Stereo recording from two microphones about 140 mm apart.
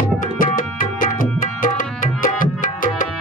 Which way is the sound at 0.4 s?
75° left (ahead or behind).